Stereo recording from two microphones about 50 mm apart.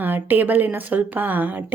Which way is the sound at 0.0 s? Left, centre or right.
Right.